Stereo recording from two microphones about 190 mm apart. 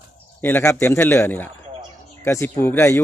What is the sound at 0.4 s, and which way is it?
Speech, 10° left (ahead or behind).